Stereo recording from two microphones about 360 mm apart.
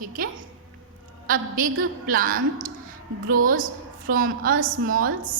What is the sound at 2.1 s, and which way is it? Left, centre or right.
Speech, right.